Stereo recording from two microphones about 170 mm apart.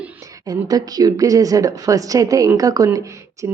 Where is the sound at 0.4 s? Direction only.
20° right (ahead or behind).